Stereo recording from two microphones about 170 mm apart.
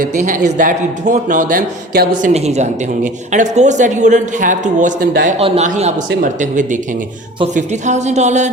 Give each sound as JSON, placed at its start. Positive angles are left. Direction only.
{"t": 0.0, "sound": "speech", "side_deg": -50}
{"t": 2.3, "sound": "speech", "side_deg": -40}
{"t": 5.4, "sound": "a man's voice", "side_deg": -35}